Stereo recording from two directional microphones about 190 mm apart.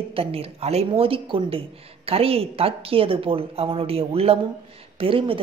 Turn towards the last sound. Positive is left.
turn(degrees=-30)  # may be behind; listen again after turning